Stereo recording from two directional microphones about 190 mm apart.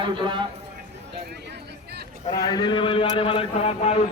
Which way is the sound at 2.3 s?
20° left (ahead or behind).